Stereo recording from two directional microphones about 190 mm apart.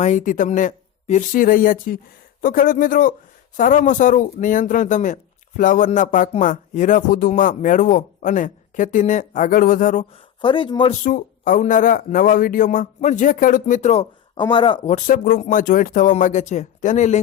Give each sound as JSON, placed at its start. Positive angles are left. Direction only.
{"t": 0.0, "sound": "speech", "side_deg": 40}
{"t": 10.4, "sound": "speech", "side_deg": 25}
{"t": 11.0, "sound": "speech", "side_deg": 45}
{"t": 14.9, "sound": "speech", "side_deg": 45}